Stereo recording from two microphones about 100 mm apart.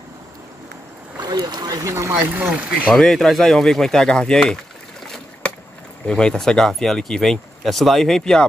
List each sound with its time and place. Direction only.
1.2 s speech: 45° right (ahead or behind)
2.1 s speech: 15° right (ahead or behind)
2.9 s speech: 5° left (ahead or behind)
5.0 s boat: 5° left (ahead or behind)
6.0 s speech: 10° left (ahead or behind)